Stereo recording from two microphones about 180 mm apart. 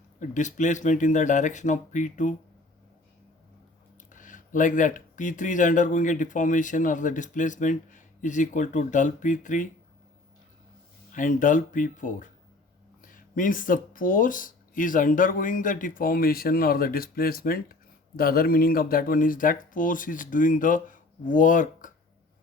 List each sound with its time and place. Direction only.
0.2 s speech: 45° left (ahead or behind)
4.1 s speech: 45° left (ahead or behind)
11.1 s speech: 45° left (ahead or behind)